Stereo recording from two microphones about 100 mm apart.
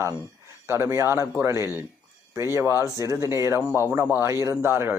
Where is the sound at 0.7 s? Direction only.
25° right (ahead or behind).